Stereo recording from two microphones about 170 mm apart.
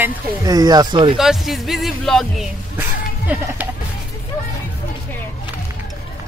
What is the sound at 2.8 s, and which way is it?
Speech, 10° right (ahead or behind).